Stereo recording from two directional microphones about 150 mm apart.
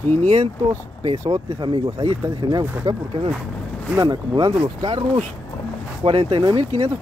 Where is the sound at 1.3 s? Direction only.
35° right (ahead or behind).